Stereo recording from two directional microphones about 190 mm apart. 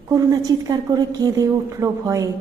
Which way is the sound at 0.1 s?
20° right (ahead or behind).